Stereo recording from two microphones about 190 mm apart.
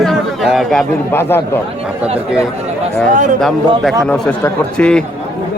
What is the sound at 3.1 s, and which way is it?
Speech, 40° right (ahead or behind).